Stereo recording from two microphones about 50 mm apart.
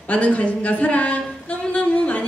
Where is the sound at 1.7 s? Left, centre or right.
Left.